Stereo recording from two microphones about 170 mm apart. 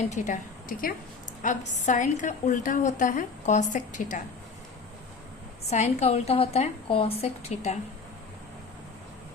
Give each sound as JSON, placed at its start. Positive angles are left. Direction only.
{"t": 0.1, "sound": "a woman's voice", "side_deg": 45}
{"t": 5.6, "sound": "a woman's voice", "side_deg": 40}